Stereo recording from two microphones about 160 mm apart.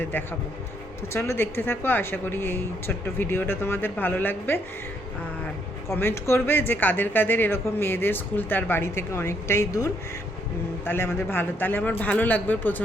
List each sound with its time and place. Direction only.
0.0 s speech: 10° left (ahead or behind)
5.9 s speech: 15° left (ahead or behind)